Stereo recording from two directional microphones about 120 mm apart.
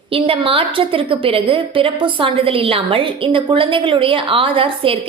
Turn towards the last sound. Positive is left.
turn(degrees=-50)  # may be behind; listen again after turning